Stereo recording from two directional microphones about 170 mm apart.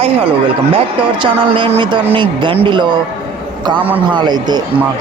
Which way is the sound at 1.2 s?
30° right (ahead or behind).